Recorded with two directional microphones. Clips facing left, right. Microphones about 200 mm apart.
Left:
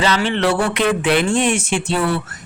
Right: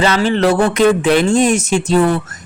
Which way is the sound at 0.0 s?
40° right (ahead or behind).